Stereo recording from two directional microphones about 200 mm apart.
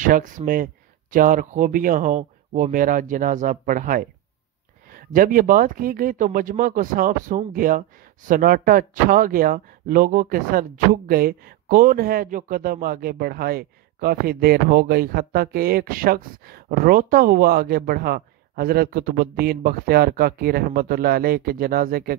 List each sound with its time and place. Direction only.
0.0 s speech: 40° right (ahead or behind)